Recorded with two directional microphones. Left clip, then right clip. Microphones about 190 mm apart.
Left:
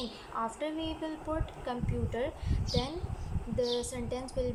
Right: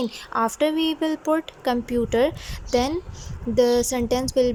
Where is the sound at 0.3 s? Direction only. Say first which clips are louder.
Right 13 dB; 60° right (ahead or behind).